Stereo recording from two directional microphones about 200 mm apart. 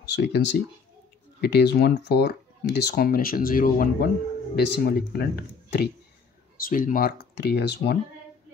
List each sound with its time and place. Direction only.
0.0 s speech: 60° left (ahead or behind)
1.5 s speech: 60° left (ahead or behind)